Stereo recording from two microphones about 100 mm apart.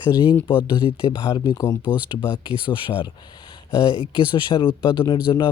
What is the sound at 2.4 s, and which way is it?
Speech, 55° left (ahead or behind).